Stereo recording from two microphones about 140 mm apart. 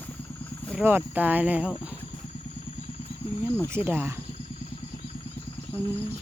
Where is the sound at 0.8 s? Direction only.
15° right (ahead or behind).